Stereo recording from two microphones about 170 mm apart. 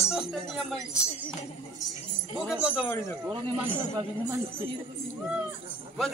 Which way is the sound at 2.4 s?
5° right (ahead or behind).